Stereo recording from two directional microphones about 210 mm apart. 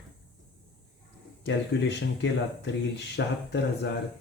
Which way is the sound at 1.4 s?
55° left (ahead or behind).